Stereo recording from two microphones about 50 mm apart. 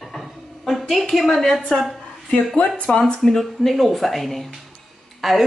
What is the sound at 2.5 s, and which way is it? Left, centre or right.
Speech, left.